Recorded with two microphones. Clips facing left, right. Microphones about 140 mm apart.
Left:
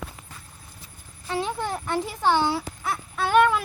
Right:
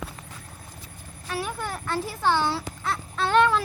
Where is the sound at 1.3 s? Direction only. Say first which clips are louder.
Left 3 dB; 20° left (ahead or behind).